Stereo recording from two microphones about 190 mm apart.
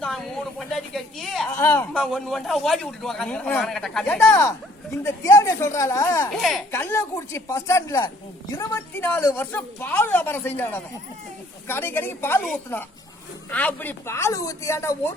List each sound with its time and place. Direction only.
0.7 s a woman's voice: centre (ahead or behind)
1.5 s a man's voice: 15° left (ahead or behind)
6.3 s a man's voice: centre (ahead or behind)
6.7 s speech: 15° left (ahead or behind)